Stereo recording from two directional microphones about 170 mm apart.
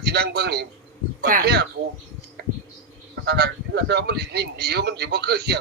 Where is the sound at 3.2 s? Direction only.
70° right (ahead or behind).